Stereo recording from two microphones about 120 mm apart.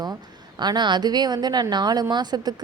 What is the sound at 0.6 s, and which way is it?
A woman's voice, 40° right (ahead or behind).